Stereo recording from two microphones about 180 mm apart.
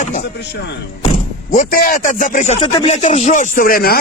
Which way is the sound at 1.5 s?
50° left (ahead or behind).